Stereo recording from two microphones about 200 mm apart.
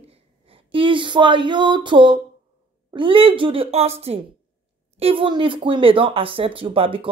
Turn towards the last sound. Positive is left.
turn(degrees=-25)  # may be behind; listen again after turning